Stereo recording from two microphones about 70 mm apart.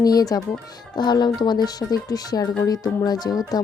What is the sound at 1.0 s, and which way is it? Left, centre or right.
Speech, left.